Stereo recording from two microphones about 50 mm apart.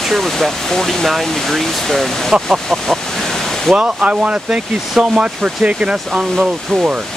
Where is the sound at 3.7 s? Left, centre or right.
Right.